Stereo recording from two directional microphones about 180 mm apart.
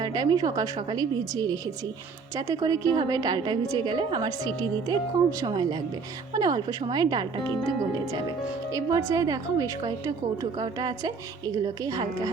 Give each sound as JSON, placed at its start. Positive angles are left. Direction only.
{"t": 0.0, "sound": "a woman's voice", "side_deg": -25}
{"t": 8.7, "sound": "a woman's voice", "side_deg": -15}